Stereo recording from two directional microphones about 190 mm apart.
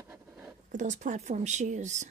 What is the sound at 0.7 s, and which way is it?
Speech, 40° right (ahead or behind).